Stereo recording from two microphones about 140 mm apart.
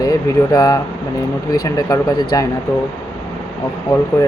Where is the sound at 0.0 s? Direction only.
30° left (ahead or behind).